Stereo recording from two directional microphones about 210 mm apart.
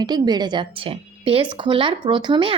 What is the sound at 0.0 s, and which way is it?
Speech, 20° right (ahead or behind).